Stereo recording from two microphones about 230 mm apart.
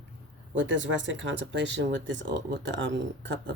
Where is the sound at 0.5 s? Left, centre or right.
Right.